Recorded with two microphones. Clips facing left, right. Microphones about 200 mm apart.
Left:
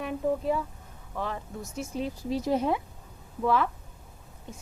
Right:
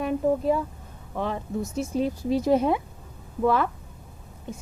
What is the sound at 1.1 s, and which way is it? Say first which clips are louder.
Speech: right 6 dB; 25° right (ahead or behind).